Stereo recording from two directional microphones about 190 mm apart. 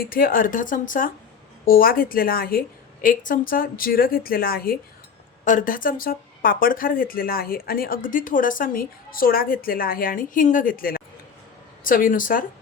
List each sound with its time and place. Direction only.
0.0 s speech: 50° left (ahead or behind)